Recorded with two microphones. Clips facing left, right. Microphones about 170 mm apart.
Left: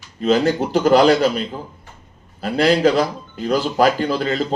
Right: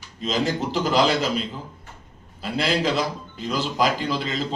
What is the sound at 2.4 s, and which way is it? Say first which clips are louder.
A man's voice: left 8 dB; 50° left (ahead or behind).